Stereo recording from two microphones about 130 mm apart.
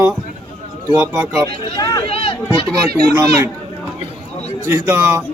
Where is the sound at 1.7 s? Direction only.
30° left (ahead or behind).